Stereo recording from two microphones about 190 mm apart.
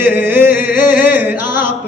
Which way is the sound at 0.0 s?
10° right (ahead or behind).